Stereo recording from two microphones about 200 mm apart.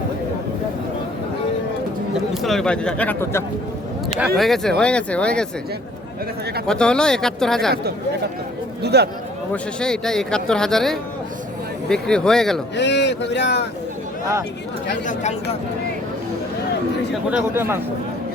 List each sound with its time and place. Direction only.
2.3 s speech: centre (ahead or behind)
6.7 s speech: 5° left (ahead or behind)
8.8 s a man's voice: 55° right (ahead or behind)
9.5 s speech: 5° left (ahead or behind)
12.7 s speech: 60° left (ahead or behind)
15.0 s speech: 35° left (ahead or behind)
17.3 s speech: 10° right (ahead or behind)